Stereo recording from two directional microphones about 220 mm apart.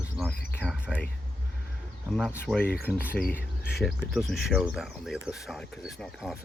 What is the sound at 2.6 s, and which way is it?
Speech, 45° left (ahead or behind).